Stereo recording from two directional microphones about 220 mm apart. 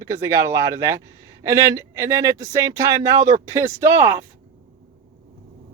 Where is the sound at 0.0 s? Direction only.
15° right (ahead or behind).